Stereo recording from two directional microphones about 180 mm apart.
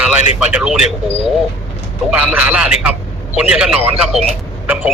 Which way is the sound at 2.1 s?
5° right (ahead or behind).